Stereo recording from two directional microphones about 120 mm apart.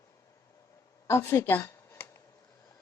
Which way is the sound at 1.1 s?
20° left (ahead or behind).